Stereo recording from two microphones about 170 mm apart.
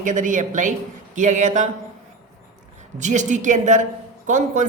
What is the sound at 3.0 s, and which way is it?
A man's voice, 45° right (ahead or behind).